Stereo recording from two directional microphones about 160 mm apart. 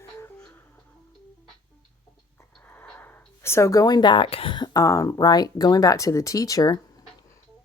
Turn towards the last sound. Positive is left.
turn(degrees=25)  # may be behind; listen again after turning